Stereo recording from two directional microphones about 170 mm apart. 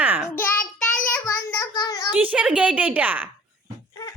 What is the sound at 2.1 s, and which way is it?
A woman's voice, 10° right (ahead or behind).